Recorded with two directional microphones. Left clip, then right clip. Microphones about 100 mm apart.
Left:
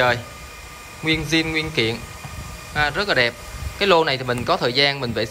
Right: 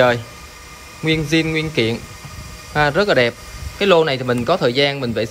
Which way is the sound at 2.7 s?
15° right (ahead or behind).